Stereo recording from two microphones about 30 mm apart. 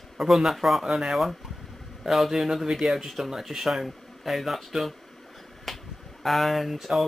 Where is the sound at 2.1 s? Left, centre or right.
Centre.